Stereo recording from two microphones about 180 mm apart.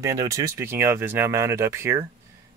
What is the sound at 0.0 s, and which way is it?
Speech, 15° right (ahead or behind).